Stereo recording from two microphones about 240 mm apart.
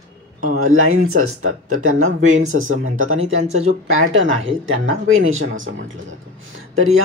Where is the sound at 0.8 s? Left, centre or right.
Right.